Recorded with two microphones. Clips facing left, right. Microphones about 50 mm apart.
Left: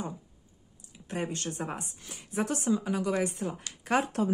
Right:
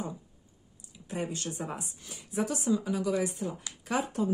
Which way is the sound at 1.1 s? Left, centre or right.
Left.